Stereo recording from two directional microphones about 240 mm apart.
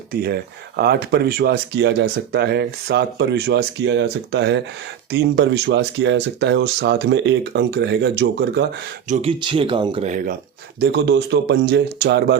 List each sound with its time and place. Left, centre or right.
0.1 s speech: right
9.0 s speech: right
10.8 s speech: right